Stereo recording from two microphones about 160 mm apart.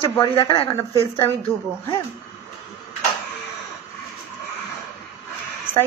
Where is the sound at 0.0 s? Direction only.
30° left (ahead or behind).